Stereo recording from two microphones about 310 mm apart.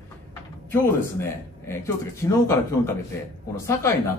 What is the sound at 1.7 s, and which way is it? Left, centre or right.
Speech, centre.